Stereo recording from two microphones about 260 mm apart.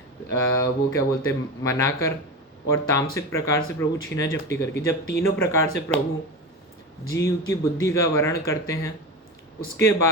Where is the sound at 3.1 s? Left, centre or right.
Centre.